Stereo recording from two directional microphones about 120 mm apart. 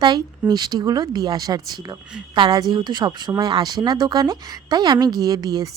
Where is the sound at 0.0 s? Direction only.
35° right (ahead or behind).